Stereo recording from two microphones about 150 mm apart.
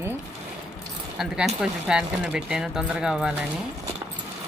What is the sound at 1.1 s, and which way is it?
Speech, 5° right (ahead or behind).